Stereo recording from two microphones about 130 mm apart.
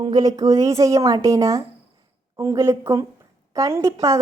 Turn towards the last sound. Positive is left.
turn(degrees=-25)  # may be behind; listen again after turning